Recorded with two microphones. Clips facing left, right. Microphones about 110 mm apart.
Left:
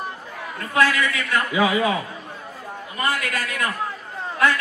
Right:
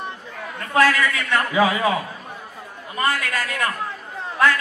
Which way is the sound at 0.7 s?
35° right (ahead or behind).